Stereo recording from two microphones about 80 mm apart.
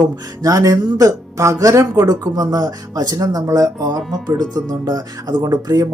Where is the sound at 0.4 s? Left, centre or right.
Right.